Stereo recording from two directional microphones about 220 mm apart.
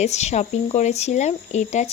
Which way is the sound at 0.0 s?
30° left (ahead or behind).